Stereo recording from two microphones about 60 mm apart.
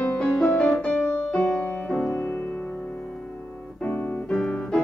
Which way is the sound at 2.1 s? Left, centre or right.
Left.